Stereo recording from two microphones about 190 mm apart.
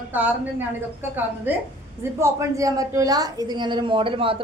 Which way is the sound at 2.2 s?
15° right (ahead or behind).